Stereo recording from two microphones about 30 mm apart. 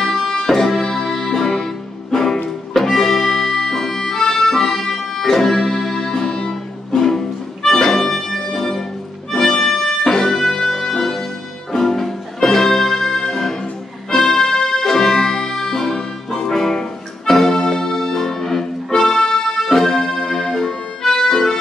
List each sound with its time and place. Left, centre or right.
0.0 s music: centre
4.2 s accordion: centre
4.8 s music: centre
9.8 s music: centre
15.5 s music: centre
18.9 s music: left
20.5 s accordion: centre